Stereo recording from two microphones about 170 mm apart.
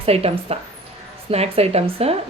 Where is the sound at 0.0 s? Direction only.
35° right (ahead or behind).